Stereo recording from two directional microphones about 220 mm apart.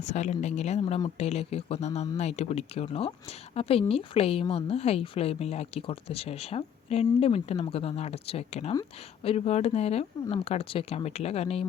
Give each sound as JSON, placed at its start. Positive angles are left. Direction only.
{"t": 0.0, "sound": "a woman's voice", "side_deg": 30}
{"t": 8.7, "sound": "speech", "side_deg": 15}
{"t": 9.3, "sound": "a woman's voice", "side_deg": 30}